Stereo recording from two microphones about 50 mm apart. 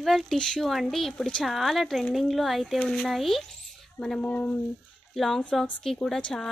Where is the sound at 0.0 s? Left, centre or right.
Centre.